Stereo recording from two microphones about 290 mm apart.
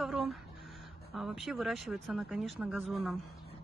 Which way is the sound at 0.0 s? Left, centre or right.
Centre.